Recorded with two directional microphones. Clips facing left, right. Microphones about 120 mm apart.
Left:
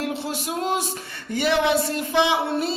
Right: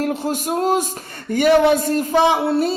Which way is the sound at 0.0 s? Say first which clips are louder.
Right 6 dB; 45° right (ahead or behind).